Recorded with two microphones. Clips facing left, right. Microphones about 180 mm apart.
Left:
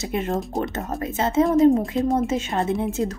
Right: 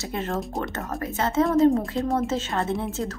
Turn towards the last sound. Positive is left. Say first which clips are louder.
# left 4 dB
turn(degrees=15)  # may be behind; listen again after turning